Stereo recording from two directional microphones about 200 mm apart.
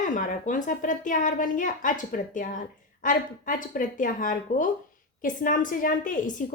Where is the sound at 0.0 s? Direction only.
40° left (ahead or behind).